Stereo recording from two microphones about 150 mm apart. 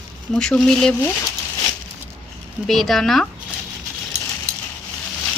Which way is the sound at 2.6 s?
Centre (ahead or behind).